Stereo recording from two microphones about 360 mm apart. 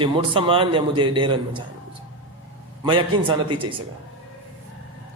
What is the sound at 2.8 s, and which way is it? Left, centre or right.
Speech, centre.